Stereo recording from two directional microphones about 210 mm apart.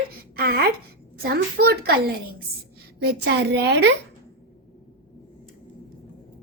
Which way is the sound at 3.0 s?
50° right (ahead or behind).